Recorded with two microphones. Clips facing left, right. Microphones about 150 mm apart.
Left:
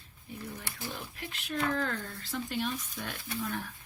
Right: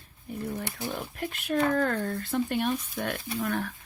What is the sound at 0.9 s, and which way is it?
Speech, 50° right (ahead or behind).